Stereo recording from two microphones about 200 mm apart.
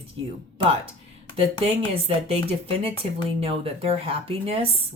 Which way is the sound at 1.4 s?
30° right (ahead or behind).